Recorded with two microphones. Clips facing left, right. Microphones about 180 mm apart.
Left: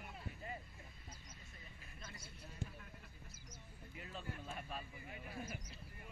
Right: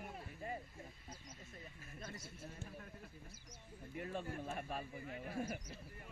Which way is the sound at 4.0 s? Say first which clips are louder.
Right 6 dB; 50° right (ahead or behind).